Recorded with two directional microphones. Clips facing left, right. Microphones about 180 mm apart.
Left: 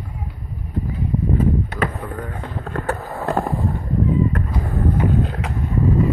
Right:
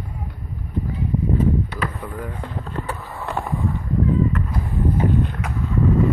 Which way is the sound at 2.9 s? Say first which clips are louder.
Left 9 dB; 45° left (ahead or behind).